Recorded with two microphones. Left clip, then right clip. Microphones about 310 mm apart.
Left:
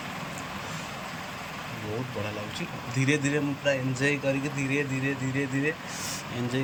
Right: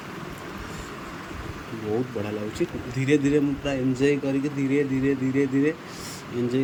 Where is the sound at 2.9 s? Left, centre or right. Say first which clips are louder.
Right 5 dB; centre.